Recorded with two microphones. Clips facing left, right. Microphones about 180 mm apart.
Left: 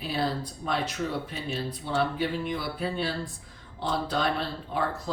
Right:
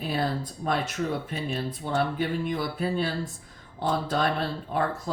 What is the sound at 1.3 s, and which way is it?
Speech, 50° right (ahead or behind).